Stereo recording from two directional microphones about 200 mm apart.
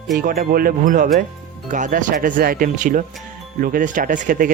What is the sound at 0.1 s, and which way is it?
Speech, 45° right (ahead or behind).